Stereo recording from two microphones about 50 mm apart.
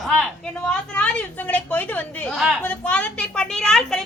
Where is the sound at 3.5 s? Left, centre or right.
Centre.